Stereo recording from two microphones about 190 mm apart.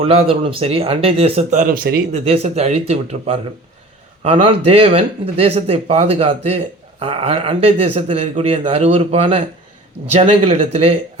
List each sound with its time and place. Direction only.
0.0 s speech: 30° right (ahead or behind); by 2.0 s 50° right (ahead or behind)
2.1 s speech: 35° right (ahead or behind)